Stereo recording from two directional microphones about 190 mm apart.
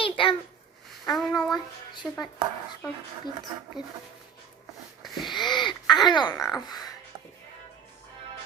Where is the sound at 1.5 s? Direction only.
25° left (ahead or behind).